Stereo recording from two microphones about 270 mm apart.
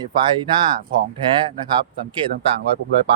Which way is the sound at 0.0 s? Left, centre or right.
Centre.